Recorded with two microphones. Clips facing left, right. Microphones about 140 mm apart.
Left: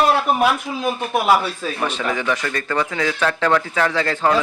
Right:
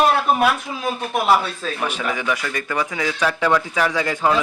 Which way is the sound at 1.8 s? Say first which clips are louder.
Left 2 dB; 10° right (ahead or behind).